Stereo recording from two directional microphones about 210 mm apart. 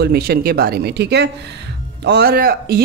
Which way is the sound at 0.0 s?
50° right (ahead or behind).